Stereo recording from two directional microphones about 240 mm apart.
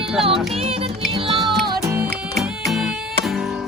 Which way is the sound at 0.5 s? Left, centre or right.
Right.